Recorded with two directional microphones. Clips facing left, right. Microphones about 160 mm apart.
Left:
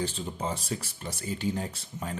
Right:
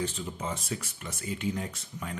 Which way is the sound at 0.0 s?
30° left (ahead or behind).